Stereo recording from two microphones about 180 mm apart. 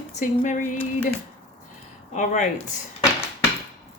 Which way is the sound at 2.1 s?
45° left (ahead or behind).